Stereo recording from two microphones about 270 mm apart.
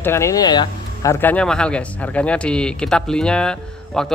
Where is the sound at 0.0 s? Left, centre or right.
Centre.